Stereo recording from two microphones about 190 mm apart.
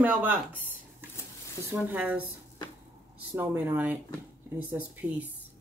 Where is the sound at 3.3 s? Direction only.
15° right (ahead or behind).